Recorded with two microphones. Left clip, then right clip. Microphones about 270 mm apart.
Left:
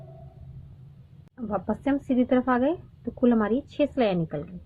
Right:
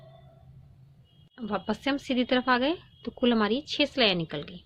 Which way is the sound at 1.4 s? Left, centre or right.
Right.